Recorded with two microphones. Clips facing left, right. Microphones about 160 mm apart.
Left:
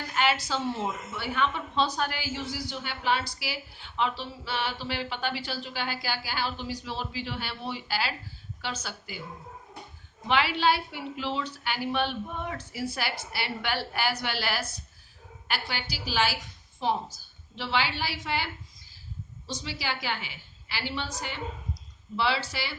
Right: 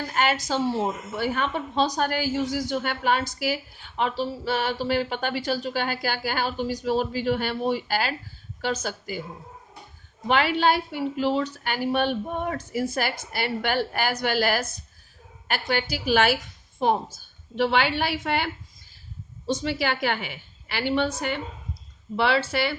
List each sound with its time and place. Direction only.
0.1 s a woman's voice: 45° right (ahead or behind)
10.2 s a woman's voice: 45° right (ahead or behind)